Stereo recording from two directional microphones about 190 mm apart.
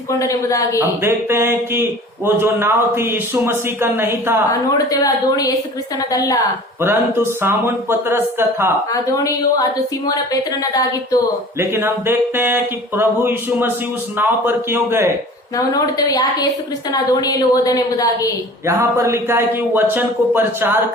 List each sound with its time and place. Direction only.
0.1 s a woman's voice: 15° left (ahead or behind)
0.8 s speech: 15° right (ahead or behind)
4.9 s a woman's voice: 20° left (ahead or behind)
6.8 s speech: 10° right (ahead or behind)
8.9 s a woman's voice: 15° left (ahead or behind)
11.6 s speech: 10° right (ahead or behind)
15.5 s a woman's voice: 20° left (ahead or behind)
18.6 s speech: 15° right (ahead or behind)